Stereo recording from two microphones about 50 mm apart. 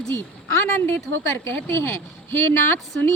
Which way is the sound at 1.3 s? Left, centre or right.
Left.